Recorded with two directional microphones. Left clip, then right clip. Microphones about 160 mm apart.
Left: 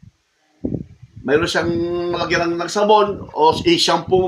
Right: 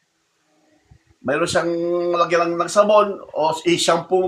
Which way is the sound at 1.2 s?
10° right (ahead or behind).